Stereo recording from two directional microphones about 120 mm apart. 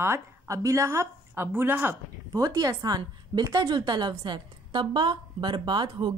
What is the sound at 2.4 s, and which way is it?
A woman's voice, 35° right (ahead or behind).